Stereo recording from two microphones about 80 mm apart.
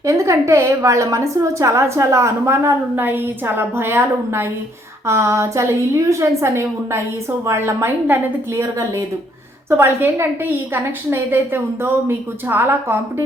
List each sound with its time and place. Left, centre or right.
0.0 s a woman's voice: right
9.6 s a woman's voice: right